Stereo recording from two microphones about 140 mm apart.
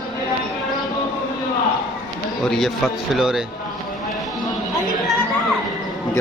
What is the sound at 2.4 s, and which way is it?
Speech, centre (ahead or behind).